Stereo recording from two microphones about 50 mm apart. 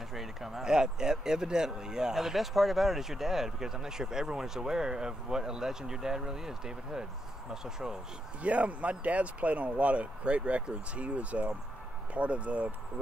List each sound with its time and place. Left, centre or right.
0.1 s speech: centre
8.4 s speech: right